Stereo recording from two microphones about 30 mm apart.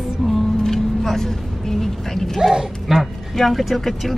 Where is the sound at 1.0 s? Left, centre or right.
Centre.